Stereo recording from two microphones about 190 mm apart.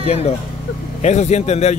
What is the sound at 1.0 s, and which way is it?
Speech, 35° left (ahead or behind).